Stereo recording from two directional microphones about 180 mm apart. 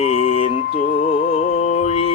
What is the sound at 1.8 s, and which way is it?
Mantra, 35° left (ahead or behind).